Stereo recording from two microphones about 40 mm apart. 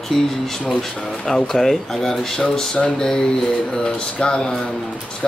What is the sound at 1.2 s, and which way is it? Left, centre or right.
Speech, centre.